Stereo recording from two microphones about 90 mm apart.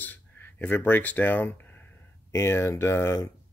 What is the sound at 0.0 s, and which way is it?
Speech, 20° left (ahead or behind).